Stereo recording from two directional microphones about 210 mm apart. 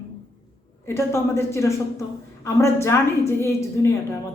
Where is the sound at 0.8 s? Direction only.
10° left (ahead or behind).